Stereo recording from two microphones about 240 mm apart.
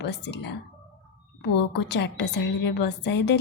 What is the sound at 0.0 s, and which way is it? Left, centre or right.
A woman's voice, left.